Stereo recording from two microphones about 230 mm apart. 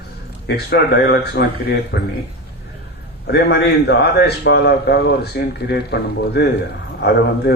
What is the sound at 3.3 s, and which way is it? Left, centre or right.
A man's voice, left.